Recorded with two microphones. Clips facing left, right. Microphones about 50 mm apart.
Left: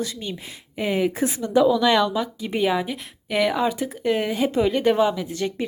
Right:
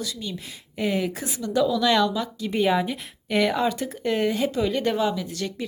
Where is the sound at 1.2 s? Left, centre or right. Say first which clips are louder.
Left 5 dB; left.